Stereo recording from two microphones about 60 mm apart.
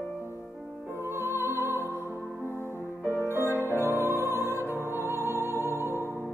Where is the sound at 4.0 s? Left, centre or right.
Right.